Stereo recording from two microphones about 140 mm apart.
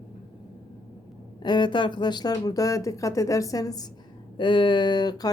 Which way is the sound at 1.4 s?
35° left (ahead or behind).